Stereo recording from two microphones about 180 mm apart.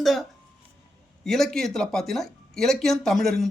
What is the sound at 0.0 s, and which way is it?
A man's voice, centre (ahead or behind).